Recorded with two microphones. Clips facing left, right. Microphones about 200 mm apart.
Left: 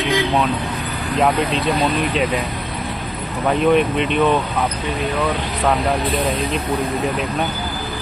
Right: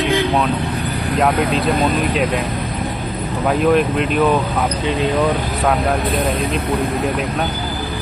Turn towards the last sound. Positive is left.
turn(degrees=-55)  # may be behind; listen again after turning